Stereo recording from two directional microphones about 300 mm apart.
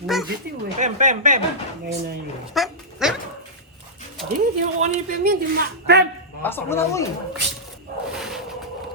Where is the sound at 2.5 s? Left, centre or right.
Centre.